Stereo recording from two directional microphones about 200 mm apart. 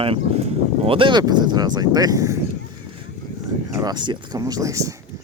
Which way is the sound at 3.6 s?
20° right (ahead or behind).